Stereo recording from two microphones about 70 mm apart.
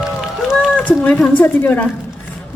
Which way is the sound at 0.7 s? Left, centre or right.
Left.